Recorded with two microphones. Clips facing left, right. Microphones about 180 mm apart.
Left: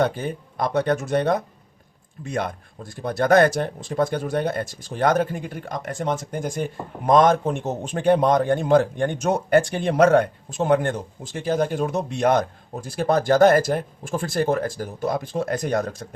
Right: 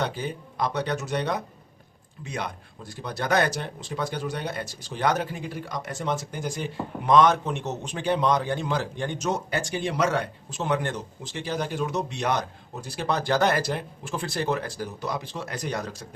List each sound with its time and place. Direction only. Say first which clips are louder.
0.0 s speech: left 6 dB; 50° left (ahead or behind)